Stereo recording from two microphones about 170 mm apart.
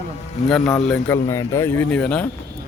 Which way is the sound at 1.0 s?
15° left (ahead or behind).